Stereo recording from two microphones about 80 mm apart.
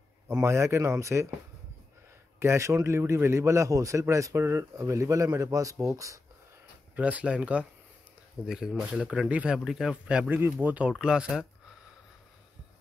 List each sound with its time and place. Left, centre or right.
0.4 s a man's voice: right
2.4 s a man's voice: right
7.0 s speech: centre
10.3 s speech: right